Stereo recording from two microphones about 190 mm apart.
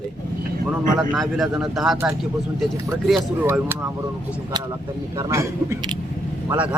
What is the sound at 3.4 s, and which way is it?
Speech, 10° right (ahead or behind).